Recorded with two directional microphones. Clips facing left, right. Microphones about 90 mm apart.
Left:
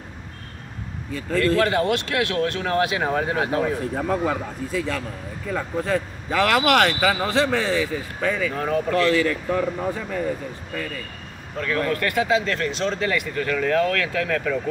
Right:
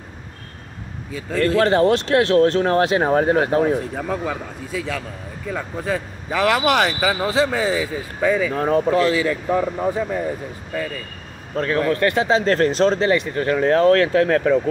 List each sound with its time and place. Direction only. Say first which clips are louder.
1.6 s speech: right 5 dB; 35° right (ahead or behind)
3.9 s a man's voice: left 2 dB; centre (ahead or behind)
8.5 s speech: right 5 dB; 35° right (ahead or behind)
8.9 s a man's voice: right 2 dB; 15° right (ahead or behind)
11.5 s speech: right 4 dB; 40° right (ahead or behind)